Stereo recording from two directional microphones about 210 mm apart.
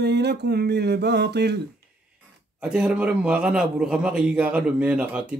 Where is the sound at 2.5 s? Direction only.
5° right (ahead or behind).